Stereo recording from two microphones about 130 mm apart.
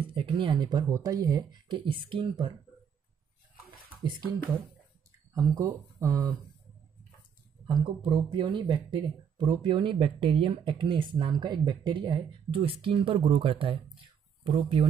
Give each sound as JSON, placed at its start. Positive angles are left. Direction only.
{"t": 0.1, "sound": "speech", "side_deg": -40}
{"t": 5.3, "sound": "speech", "side_deg": -25}
{"t": 7.6, "sound": "speech", "side_deg": -35}